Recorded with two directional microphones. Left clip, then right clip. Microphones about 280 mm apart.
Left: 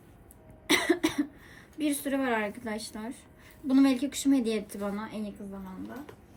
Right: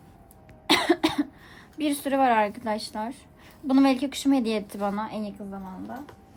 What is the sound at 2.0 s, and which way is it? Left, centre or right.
A woman's voice, right.